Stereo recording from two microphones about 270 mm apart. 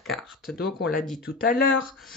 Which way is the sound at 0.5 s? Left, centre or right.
Left.